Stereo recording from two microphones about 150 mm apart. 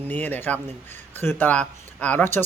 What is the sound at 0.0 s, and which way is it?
A man's voice, 15° left (ahead or behind).